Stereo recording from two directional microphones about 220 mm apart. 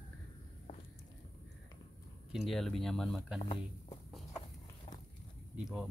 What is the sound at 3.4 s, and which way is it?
Speech, 20° left (ahead or behind).